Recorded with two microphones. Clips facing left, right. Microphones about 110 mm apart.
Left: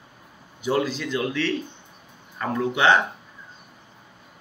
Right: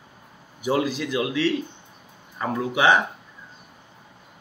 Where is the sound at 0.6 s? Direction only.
15° right (ahead or behind).